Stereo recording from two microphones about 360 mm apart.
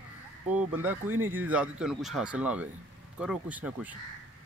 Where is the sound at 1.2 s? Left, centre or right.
Centre.